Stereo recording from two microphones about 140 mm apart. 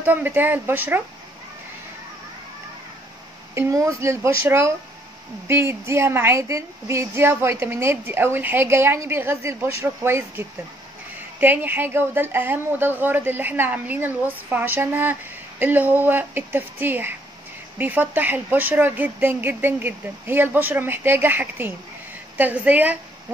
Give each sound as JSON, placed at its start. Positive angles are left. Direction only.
{"t": 0.0, "sound": "a woman's voice", "side_deg": -15}
{"t": 3.5, "sound": "a woman's voice", "side_deg": -20}